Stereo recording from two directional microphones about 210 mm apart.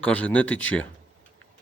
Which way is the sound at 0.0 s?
5° left (ahead or behind).